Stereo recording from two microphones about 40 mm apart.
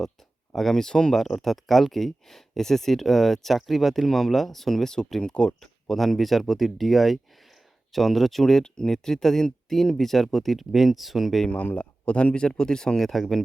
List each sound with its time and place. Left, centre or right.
0.5 s speech: centre
5.2 s speech: left
5.9 s speech: centre
11.8 s speech: left
13.0 s speech: centre